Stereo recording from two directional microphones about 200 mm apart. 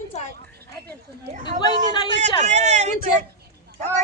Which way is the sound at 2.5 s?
35° right (ahead or behind).